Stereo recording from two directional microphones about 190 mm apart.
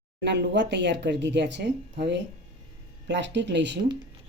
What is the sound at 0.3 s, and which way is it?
Speech, 65° right (ahead or behind).